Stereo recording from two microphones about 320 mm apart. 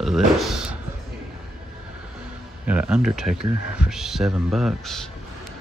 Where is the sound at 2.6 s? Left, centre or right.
Centre.